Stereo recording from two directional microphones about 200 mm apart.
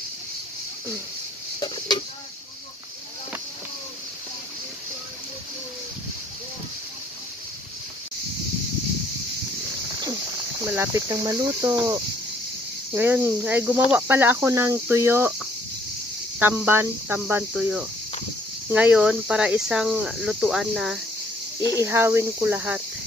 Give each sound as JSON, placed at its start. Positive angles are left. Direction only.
{"t": 1.6, "sound": "a sound", "side_deg": 20}
{"t": 10.6, "sound": "speech", "side_deg": -10}
{"t": 21.8, "sound": "speech", "side_deg": -10}